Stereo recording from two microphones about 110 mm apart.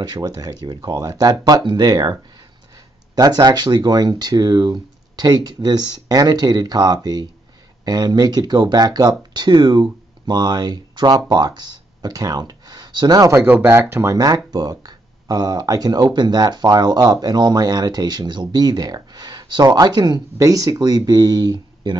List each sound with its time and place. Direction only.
0.0 s speech: 35° right (ahead or behind)
3.2 s speech: 35° right (ahead or behind)
13.3 s speech: 20° right (ahead or behind)
14.1 s speech: 35° right (ahead or behind)